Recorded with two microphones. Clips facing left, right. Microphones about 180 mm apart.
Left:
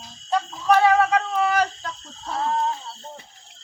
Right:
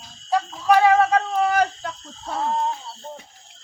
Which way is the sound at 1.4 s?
45° right (ahead or behind).